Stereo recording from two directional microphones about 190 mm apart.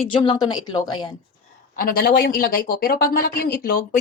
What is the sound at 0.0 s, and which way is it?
A woman's voice, 30° left (ahead or behind).